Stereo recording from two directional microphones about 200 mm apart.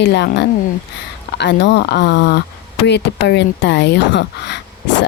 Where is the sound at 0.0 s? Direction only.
60° left (ahead or behind).